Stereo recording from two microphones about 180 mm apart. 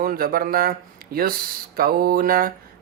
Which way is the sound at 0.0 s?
55° right (ahead or behind).